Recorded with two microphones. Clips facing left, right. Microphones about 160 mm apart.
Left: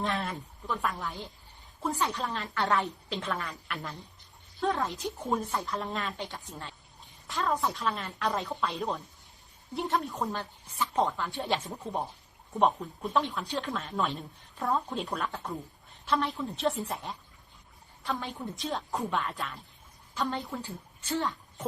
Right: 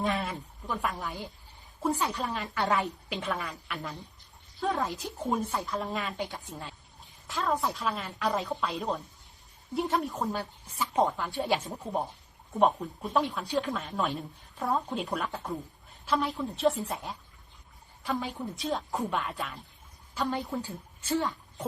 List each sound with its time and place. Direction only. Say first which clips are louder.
0.0 s speech: right 2 dB; centre (ahead or behind)
0.7 s a woman's voice: even; 15° right (ahead or behind); by 6.1 s centre (ahead or behind)
6.1 s a woman's voice: right 3 dB; 10° right (ahead or behind)
7.3 s a woman's voice: even; centre (ahead or behind)